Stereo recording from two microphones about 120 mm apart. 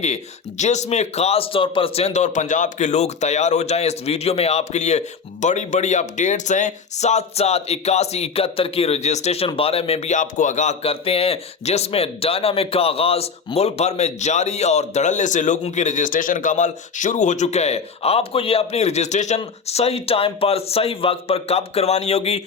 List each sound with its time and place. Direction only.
0.6 s a man's voice: 75° left (ahead or behind)
10.8 s a man's voice: 55° left (ahead or behind); by 19.4 s 75° left (ahead or behind)
19.6 s speech: 60° left (ahead or behind)